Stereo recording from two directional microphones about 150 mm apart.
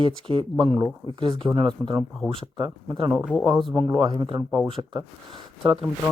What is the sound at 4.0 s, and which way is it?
Speech, 30° right (ahead or behind).